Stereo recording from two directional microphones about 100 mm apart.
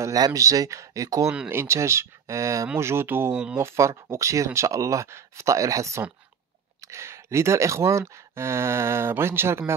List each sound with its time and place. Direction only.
0.0 s speech: 35° right (ahead or behind)
1.5 s speech: 25° right (ahead or behind)